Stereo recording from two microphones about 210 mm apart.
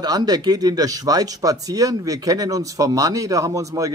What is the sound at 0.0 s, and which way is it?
Speech, 20° right (ahead or behind).